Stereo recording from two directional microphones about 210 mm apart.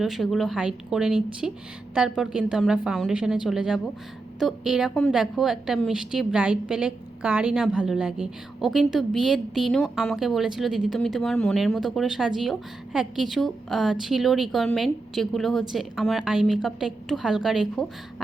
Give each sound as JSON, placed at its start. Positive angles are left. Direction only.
{"t": 0.0, "sound": "a woman's voice", "side_deg": 0}